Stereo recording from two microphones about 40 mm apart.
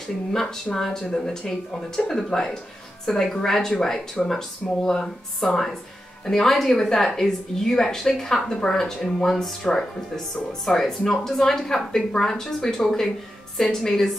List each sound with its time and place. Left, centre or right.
0.3 s speech: centre